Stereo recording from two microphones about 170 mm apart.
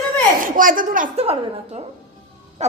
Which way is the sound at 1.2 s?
35° right (ahead or behind).